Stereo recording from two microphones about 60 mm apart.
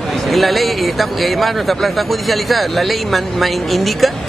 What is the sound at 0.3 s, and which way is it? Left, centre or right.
Speech, centre.